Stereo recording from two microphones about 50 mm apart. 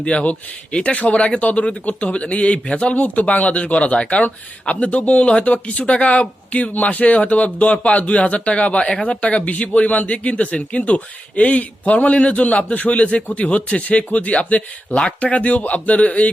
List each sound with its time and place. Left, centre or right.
0.0 s a man's voice: left